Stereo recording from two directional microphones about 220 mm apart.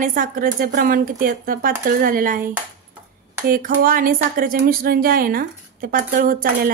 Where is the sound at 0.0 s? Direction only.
35° right (ahead or behind).